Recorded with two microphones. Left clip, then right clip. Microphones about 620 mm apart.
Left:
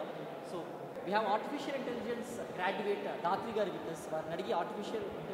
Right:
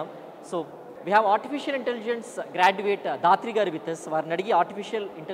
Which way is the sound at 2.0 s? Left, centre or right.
Right.